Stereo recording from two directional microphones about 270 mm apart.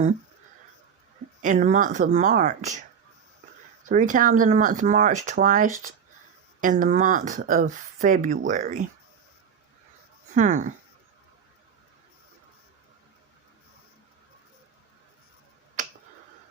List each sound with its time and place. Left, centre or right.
1.4 s speech: right
3.8 s speech: right
10.3 s speech: right
15.8 s finger snapping: right